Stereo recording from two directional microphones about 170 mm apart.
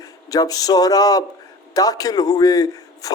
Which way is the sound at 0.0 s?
20° left (ahead or behind).